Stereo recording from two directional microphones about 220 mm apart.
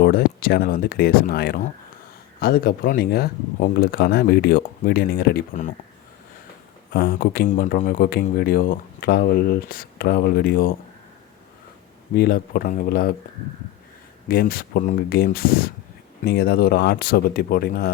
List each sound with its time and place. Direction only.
0.0 s speech: 40° left (ahead or behind)
6.9 s speech: 45° left (ahead or behind)
12.1 s speech: 45° left (ahead or behind)
14.3 s speech: 40° left (ahead or behind)